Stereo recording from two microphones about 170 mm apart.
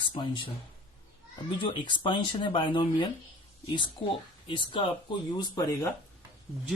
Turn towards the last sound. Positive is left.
turn(degrees=20)  # may be behind; listen again after turning